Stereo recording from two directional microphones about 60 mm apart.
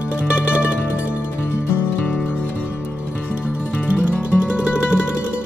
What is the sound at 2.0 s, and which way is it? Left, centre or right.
Music, left.